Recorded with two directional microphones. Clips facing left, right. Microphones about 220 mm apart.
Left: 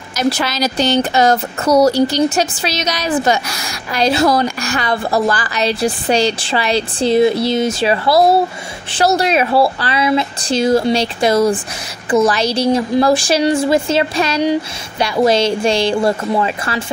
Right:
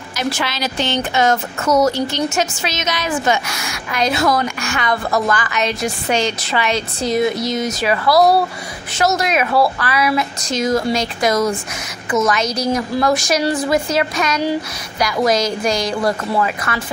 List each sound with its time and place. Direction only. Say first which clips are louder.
0.2 s a woman's voice: left 5 dB; 40° left (ahead or behind)